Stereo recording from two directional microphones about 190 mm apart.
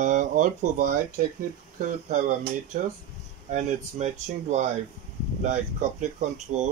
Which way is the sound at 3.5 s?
40° right (ahead or behind).